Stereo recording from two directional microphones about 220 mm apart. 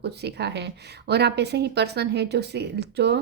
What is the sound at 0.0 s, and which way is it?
A woman's voice, 50° right (ahead or behind).